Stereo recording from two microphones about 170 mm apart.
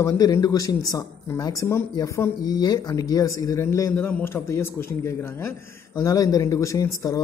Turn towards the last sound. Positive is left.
turn(degrees=20)  # may be behind; listen again after turning